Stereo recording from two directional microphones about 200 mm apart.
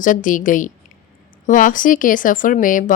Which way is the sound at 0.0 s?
40° left (ahead or behind).